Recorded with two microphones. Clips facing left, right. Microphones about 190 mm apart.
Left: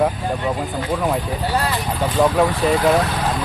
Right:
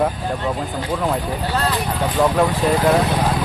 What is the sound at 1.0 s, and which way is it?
Speech, 10° left (ahead or behind).